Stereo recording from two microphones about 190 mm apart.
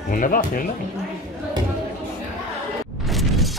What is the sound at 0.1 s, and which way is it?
Speech, 45° left (ahead or behind).